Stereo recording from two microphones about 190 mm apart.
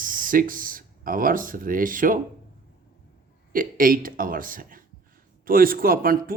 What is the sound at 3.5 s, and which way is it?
Speech, 50° right (ahead or behind).